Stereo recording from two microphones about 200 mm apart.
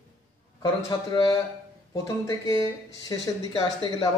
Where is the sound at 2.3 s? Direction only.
20° left (ahead or behind).